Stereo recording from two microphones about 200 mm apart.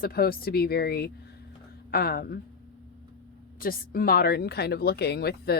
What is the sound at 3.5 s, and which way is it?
Speech, 45° left (ahead or behind).